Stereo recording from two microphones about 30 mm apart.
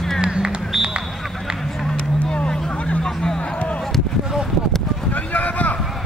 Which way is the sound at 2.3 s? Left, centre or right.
Left.